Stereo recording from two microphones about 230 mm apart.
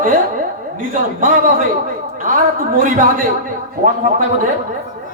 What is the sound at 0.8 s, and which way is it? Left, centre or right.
A man's voice, right.